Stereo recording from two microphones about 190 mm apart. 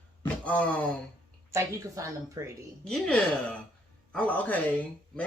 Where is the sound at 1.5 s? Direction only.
15° right (ahead or behind).